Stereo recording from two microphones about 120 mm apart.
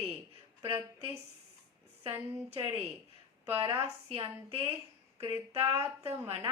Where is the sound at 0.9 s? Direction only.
65° right (ahead or behind).